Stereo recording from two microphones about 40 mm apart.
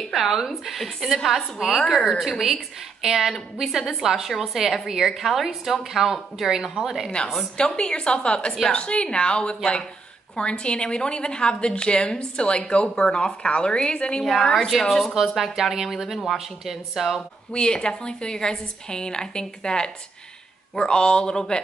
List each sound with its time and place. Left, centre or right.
0.1 s a woman's voice: centre
1.6 s speech: centre
2.0 s a woman's voice: centre
7.5 s a woman's voice: left
14.2 s a woman's voice: centre
15.3 s speech: centre
17.5 s a woman's voice: left